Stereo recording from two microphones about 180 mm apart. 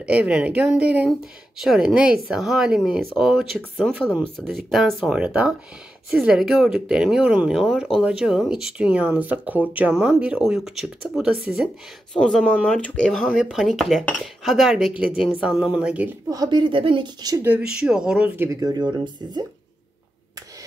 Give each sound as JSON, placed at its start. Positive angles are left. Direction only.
{"t": 0.0, "sound": "speech", "side_deg": -5}
{"t": 16.3, "sound": "a woman's voice", "side_deg": -25}
{"t": 17.5, "sound": "speech", "side_deg": -5}